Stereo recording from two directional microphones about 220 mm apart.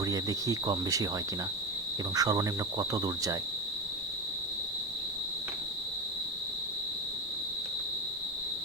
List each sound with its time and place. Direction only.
0.0 s cricket: 15° right (ahead or behind)
2.1 s cricket: 15° right (ahead or behind)